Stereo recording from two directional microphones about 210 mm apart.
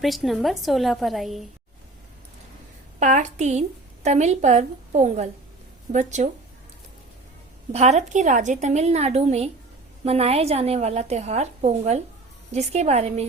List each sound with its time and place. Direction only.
0.0 s a woman's voice: centre (ahead or behind)
3.0 s a woman's voice: 35° right (ahead or behind)
7.7 s a woman's voice: 30° right (ahead or behind)